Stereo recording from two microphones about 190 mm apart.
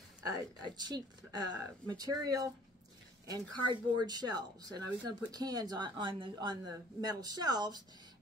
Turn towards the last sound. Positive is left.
turn(degrees=-20)  # may be behind; listen again after turning